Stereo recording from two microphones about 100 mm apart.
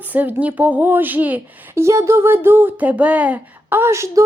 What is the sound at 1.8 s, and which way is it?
Speech, 30° right (ahead or behind).